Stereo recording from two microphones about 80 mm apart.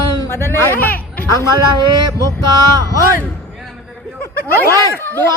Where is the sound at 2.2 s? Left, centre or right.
Right.